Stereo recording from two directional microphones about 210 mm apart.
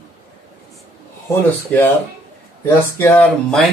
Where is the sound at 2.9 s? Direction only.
10° left (ahead or behind).